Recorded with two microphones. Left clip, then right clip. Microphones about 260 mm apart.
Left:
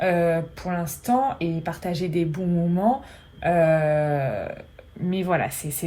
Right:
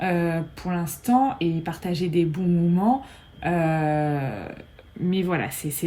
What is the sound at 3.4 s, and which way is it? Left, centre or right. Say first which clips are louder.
Speech: left 5 dB; centre.